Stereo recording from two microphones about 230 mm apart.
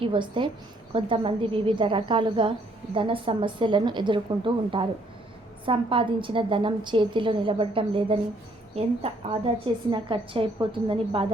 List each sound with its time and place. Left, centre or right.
0.0 s a woman's voice: right